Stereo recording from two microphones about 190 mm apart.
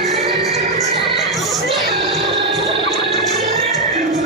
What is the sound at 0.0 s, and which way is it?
Music, centre (ahead or behind).